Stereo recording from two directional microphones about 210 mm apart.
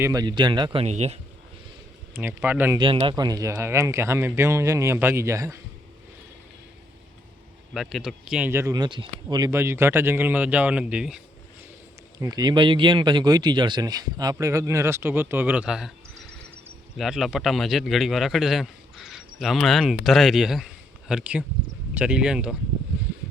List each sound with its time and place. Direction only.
0.0 s speech: 15° right (ahead or behind)
2.1 s speech: 10° right (ahead or behind)
2.7 s speech: 25° right (ahead or behind)
7.7 s speech: centre (ahead or behind)
12.2 s speech: 20° right (ahead or behind)
17.0 s a man's voice: centre (ahead or behind)